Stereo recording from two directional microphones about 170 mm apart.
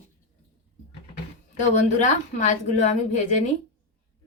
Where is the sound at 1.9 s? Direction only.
45° left (ahead or behind).